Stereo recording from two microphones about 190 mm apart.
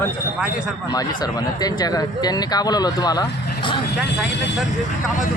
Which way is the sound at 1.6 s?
20° left (ahead or behind).